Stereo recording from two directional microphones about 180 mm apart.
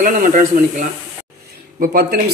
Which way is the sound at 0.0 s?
45° right (ahead or behind).